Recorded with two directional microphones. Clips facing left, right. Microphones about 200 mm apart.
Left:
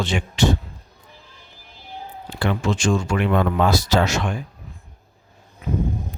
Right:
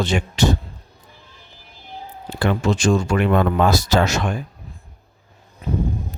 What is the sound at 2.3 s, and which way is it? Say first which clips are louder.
Speech: right 3 dB; 40° right (ahead or behind).